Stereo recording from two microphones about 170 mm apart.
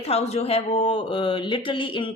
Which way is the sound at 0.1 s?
35° left (ahead or behind).